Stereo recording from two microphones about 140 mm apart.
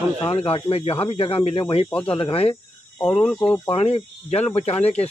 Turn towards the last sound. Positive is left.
turn(degrees=50)  # may be behind; listen again after turning